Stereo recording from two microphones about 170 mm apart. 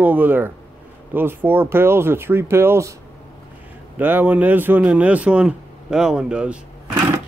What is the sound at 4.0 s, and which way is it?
Speech, 10° right (ahead or behind).